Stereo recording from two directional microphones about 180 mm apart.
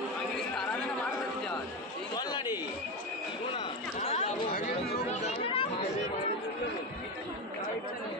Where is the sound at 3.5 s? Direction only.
30° left (ahead or behind).